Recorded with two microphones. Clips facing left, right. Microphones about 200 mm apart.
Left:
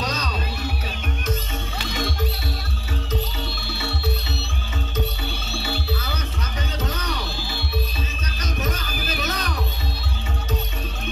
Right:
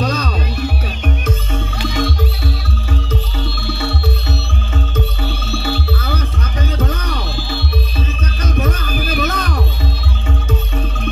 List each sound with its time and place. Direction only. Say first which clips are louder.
0.0 s music: right 7 dB; 55° right (ahead or behind)
5.6 s music: right 4 dB; 55° right (ahead or behind)
8.5 s music: right 8 dB; 55° right (ahead or behind)